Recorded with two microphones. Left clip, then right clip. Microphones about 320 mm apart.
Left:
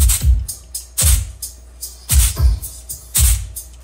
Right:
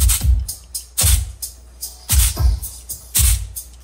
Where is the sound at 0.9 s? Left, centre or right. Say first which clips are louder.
Even; centre.